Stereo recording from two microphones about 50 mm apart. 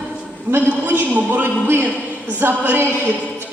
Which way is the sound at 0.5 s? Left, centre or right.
Right.